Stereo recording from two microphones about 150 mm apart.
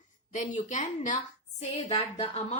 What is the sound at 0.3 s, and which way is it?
Speech, 55° left (ahead or behind).